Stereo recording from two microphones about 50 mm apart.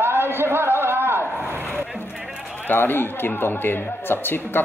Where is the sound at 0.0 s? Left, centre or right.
Right.